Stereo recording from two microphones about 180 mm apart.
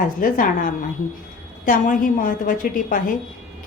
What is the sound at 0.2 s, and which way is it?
A woman's voice, 50° left (ahead or behind).